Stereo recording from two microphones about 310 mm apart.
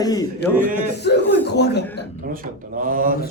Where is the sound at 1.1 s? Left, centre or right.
Left.